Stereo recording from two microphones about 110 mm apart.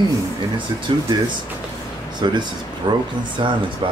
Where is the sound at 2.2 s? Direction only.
40° right (ahead or behind).